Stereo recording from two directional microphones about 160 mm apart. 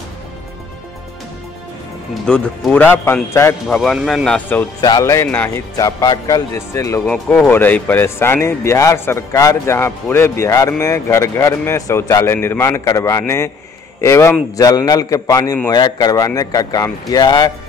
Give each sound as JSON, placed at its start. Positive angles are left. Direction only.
{"t": 2.2, "sound": "speech", "side_deg": 5}
{"t": 3.6, "sound": "a man's voice", "side_deg": 0}
{"t": 4.8, "sound": "a man's voice", "side_deg": 20}
{"t": 7.1, "sound": "a man's voice", "side_deg": 10}